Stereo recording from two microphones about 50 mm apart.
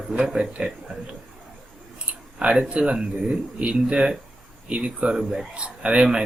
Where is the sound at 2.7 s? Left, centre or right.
Right.